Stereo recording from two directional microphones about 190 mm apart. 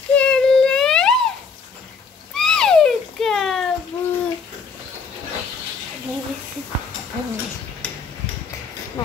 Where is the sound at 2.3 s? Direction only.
5° left (ahead or behind).